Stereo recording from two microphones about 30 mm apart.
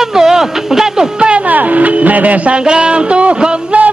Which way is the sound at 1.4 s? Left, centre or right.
Right.